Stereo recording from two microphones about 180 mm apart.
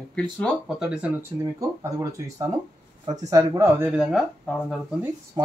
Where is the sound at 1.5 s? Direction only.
20° right (ahead or behind).